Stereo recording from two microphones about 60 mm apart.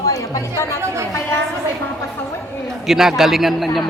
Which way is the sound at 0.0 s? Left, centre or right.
Left.